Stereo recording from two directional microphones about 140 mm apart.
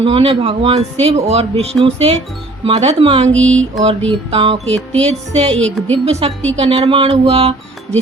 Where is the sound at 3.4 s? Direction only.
10° left (ahead or behind).